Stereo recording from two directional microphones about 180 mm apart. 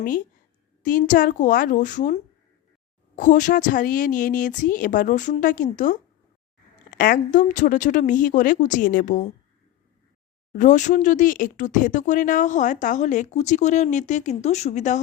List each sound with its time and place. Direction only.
0.0 s speech: 50° left (ahead or behind)
10.5 s speech: 45° left (ahead or behind)